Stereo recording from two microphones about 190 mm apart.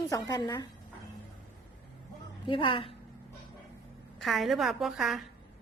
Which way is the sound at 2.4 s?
25° left (ahead or behind).